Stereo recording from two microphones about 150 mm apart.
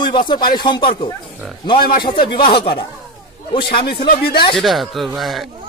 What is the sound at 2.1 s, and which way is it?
Speech, 35° left (ahead or behind).